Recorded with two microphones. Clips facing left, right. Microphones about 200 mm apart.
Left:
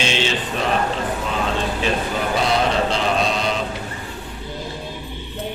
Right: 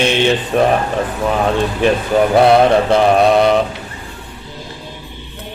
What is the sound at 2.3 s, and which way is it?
Mantra, 60° right (ahead or behind).